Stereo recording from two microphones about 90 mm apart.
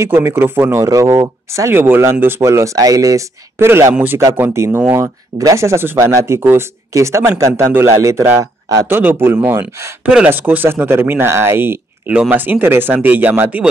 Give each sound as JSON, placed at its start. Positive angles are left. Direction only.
{"t": 0.0, "sound": "speech", "side_deg": -25}
{"t": 0.8, "sound": "speech", "side_deg": -35}
{"t": 3.5, "sound": "speech", "side_deg": -25}
{"t": 5.0, "sound": "speech", "side_deg": -40}
{"t": 8.8, "sound": "speech", "side_deg": -20}
{"t": 10.0, "sound": "speech", "side_deg": -15}
{"t": 12.1, "sound": "speech", "side_deg": -15}